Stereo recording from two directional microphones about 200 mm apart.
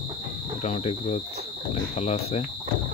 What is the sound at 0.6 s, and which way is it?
Speech, 35° left (ahead or behind).